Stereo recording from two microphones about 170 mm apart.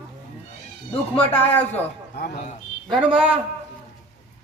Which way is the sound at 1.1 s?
10° left (ahead or behind).